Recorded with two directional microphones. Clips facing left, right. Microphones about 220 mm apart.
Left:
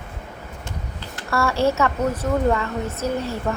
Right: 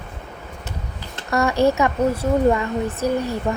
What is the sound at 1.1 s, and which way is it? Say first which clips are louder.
Speech: right 3 dB; 20° right (ahead or behind).